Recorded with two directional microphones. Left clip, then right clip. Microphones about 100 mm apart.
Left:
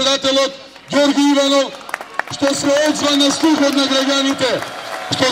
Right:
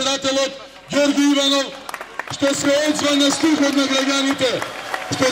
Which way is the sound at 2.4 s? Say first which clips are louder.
Left 2 dB; 35° left (ahead or behind).